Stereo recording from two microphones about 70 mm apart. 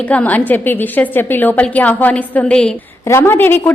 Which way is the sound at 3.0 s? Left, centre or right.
Left.